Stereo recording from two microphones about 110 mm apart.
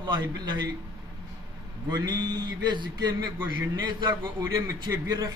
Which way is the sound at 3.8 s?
45° right (ahead or behind).